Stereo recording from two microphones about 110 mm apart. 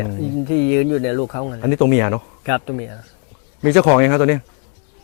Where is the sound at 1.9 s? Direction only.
5° left (ahead or behind).